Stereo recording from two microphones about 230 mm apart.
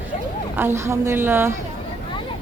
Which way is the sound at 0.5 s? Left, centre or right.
Centre.